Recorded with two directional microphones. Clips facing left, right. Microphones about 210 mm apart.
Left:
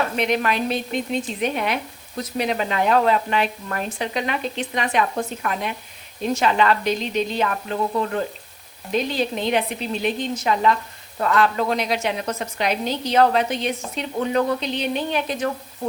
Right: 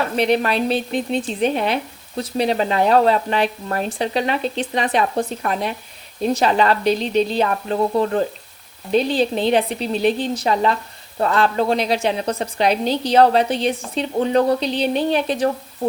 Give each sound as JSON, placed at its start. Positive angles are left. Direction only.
{"t": 0.2, "sound": "speech", "side_deg": -35}